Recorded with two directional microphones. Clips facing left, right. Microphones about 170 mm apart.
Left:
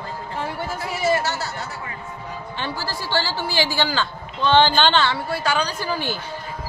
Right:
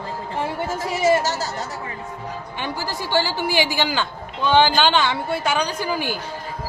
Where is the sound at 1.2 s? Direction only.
40° right (ahead or behind).